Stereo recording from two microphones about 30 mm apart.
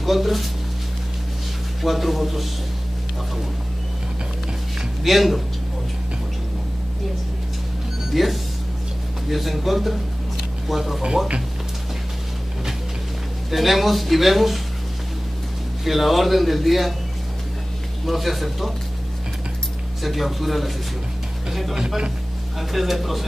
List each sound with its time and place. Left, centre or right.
0.0 s speech: centre
1.8 s speech: centre
5.0 s speech: centre
8.1 s speech: centre
13.5 s speech: centre
15.8 s speech: centre
18.0 s speech: centre
20.0 s speech: centre
21.5 s a sound: centre
21.7 s speech: right
22.6 s speech: centre